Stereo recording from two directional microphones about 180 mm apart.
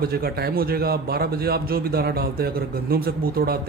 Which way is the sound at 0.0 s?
60° right (ahead or behind).